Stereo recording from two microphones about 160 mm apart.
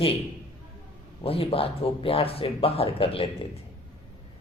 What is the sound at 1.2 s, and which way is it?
A man's voice, 35° left (ahead or behind).